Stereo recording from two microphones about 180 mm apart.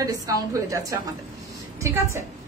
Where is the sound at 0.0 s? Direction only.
20° right (ahead or behind).